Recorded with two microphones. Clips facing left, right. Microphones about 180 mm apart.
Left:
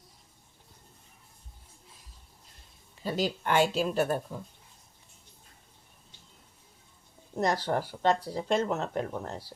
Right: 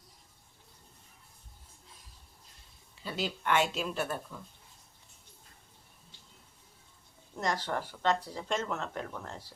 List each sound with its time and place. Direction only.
3.0 s speech: 40° left (ahead or behind)
7.3 s speech: 35° left (ahead or behind)